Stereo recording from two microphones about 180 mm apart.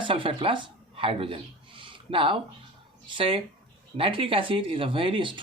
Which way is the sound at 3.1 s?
30° right (ahead or behind).